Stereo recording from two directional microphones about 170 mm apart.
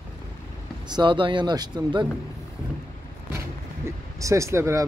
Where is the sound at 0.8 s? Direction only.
25° right (ahead or behind).